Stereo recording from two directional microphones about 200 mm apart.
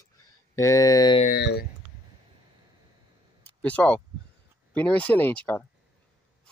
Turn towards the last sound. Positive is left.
turn(degrees=10)  # may be behind; listen again after turning